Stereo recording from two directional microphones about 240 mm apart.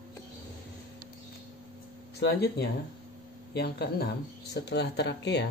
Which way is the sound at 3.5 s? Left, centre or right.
Left.